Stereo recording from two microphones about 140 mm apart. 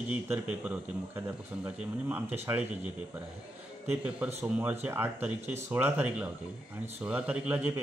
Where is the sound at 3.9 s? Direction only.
10° right (ahead or behind).